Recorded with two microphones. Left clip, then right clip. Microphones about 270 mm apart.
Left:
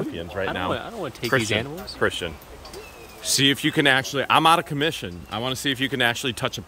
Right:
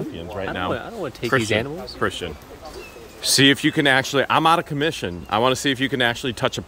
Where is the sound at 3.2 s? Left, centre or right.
Centre.